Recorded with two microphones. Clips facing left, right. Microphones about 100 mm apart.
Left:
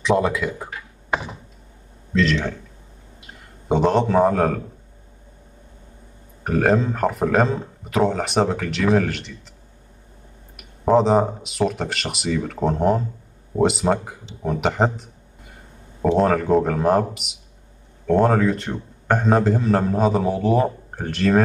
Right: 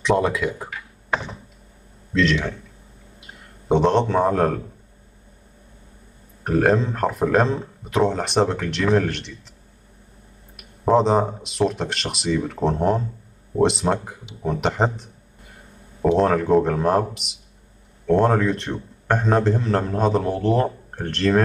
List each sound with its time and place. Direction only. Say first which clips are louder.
0.0 s a man's voice: even; centre (ahead or behind)
2.1 s a man's voice: even; centre (ahead or behind)
3.2 s a sound: even; centre (ahead or behind)
6.4 s a man's voice: even; centre (ahead or behind)
10.5 s a man's voice: left 1 dB; centre (ahead or behind)